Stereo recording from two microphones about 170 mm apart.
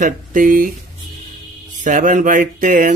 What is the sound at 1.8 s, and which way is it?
Speech, 50° right (ahead or behind).